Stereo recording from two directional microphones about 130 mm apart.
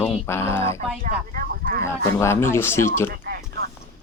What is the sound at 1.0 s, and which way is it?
Speech, 90° right.